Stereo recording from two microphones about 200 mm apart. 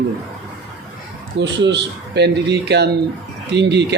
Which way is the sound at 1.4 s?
60° right (ahead or behind).